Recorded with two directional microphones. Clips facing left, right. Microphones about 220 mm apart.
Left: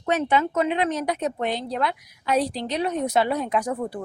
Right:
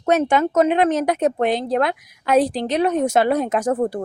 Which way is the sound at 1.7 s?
50° right (ahead or behind).